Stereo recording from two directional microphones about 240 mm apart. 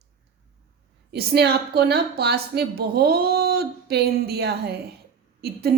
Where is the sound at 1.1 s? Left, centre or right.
Right.